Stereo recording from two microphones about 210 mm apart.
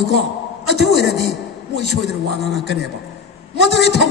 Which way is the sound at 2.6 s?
55° left (ahead or behind).